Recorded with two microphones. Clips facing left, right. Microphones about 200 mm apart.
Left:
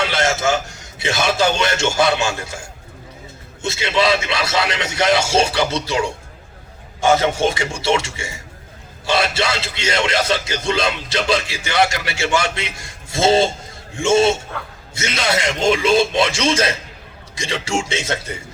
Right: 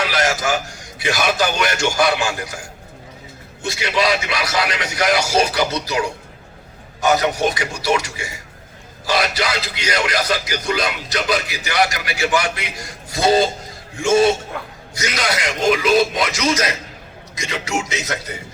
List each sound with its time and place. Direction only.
0.0 s a man's voice: 25° left (ahead or behind)
14.5 s a man's voice: 15° right (ahead or behind)
14.9 s a man's voice: 25° left (ahead or behind)